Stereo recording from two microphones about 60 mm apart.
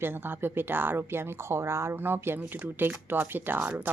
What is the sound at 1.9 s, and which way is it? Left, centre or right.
A woman's voice, right.